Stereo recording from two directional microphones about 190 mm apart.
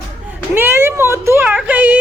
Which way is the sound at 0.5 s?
10° right (ahead or behind).